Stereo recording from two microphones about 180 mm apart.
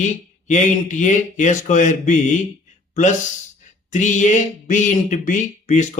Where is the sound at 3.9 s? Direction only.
40° left (ahead or behind).